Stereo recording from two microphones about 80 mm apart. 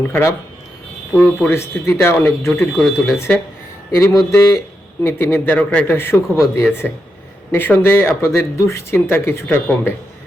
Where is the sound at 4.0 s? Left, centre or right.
Left.